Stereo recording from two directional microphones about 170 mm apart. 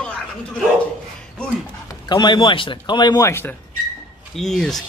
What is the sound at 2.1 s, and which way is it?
A man's voice, 25° left (ahead or behind).